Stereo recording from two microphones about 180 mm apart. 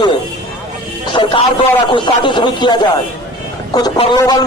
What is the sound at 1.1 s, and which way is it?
A man's voice, 25° left (ahead or behind).